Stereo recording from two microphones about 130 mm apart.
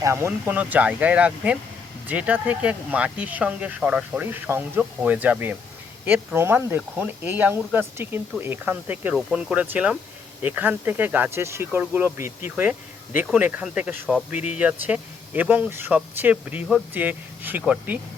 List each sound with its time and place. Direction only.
0.0 s speech: 20° right (ahead or behind)